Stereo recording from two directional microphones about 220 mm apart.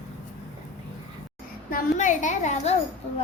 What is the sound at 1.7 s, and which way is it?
A woman's voice, 35° left (ahead or behind).